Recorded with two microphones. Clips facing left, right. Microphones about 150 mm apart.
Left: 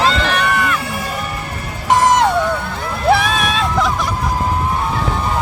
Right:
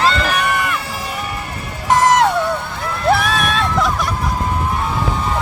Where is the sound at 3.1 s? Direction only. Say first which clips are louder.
Left 1 dB; centre (ahead or behind).